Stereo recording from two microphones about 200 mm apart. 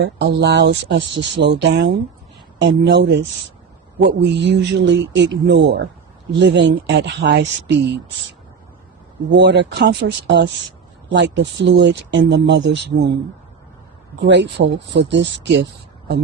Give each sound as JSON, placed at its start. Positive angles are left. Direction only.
{"t": 0.0, "sound": "speech", "side_deg": -55}
{"t": 9.3, "sound": "speech", "side_deg": -60}
{"t": 14.3, "sound": "speech", "side_deg": -60}